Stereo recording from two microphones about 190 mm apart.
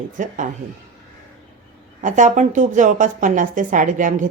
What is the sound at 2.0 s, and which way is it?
A woman's voice, 40° right (ahead or behind).